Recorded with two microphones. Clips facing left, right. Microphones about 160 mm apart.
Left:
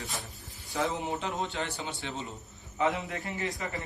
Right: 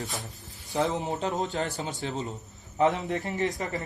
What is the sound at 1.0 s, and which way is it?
A man's voice, 40° right (ahead or behind).